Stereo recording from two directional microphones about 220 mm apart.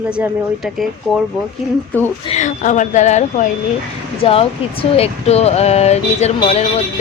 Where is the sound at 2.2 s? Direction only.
30° left (ahead or behind).